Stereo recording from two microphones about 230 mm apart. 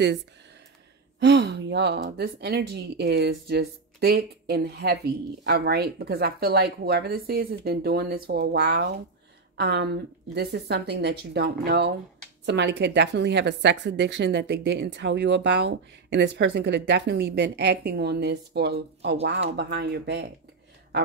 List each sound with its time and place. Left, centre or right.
1.2 s speech: right